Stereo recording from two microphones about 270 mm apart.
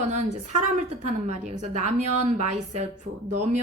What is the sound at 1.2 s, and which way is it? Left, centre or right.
A woman's voice, right.